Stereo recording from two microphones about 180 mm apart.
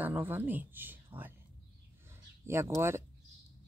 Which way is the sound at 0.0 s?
10° right (ahead or behind).